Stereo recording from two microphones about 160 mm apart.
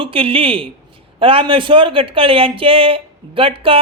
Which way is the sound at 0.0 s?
35° right (ahead or behind).